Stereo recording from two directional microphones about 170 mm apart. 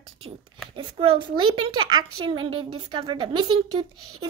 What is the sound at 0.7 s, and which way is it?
A woman's voice, 30° right (ahead or behind).